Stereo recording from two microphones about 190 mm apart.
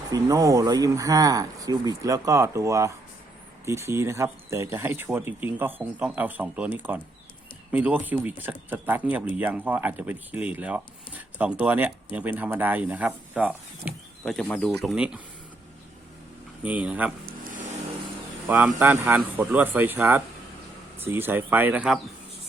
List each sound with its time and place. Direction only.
0.1 s speech: 20° right (ahead or behind)
16.6 s speech: 10° right (ahead or behind)
18.4 s speech: 10° right (ahead or behind)